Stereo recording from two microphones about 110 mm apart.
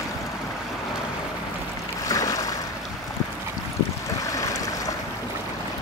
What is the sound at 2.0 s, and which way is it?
Boat, 30° left (ahead or behind).